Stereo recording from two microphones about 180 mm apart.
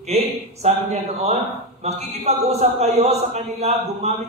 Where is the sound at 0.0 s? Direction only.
35° right (ahead or behind).